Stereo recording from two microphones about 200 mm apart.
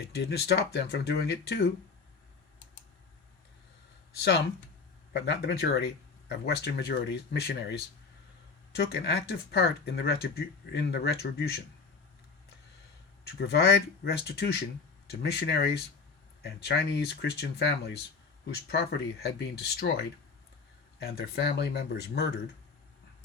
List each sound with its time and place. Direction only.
0.1 s speech: 55° left (ahead or behind)
4.2 s speech: 55° left (ahead or behind)
13.2 s speech: 55° left (ahead or behind)